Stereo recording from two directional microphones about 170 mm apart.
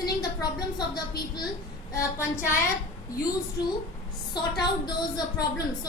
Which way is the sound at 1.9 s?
15° left (ahead or behind).